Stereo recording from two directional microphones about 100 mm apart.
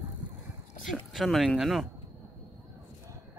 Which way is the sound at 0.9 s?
Centre (ahead or behind).